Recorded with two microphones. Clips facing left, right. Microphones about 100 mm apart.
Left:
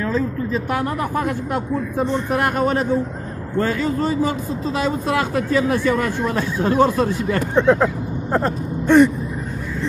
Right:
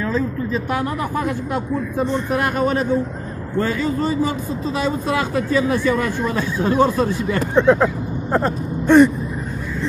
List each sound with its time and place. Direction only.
0.7 s a woman's voice: 50° left (ahead or behind)
3.5 s a man's voice: 50° left (ahead or behind)
7.5 s speech: centre (ahead or behind)
8.8 s gasp: 30° right (ahead or behind)